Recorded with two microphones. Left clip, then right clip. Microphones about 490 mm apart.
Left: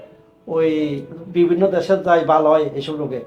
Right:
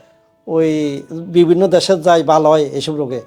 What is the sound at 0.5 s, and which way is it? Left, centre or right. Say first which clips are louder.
A man's voice: right 3 dB; right.